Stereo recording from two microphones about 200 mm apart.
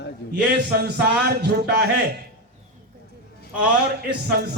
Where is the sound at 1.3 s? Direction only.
55° right (ahead or behind).